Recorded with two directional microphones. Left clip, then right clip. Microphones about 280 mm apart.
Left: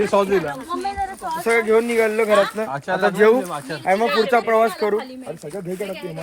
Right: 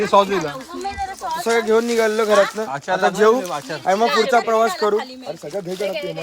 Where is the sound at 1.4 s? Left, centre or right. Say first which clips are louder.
Even; centre.